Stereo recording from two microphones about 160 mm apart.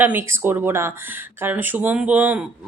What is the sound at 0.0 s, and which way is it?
Speech, 15° right (ahead or behind).